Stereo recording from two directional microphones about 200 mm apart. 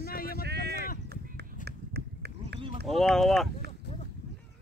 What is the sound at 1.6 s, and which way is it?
Run, 55° right (ahead or behind).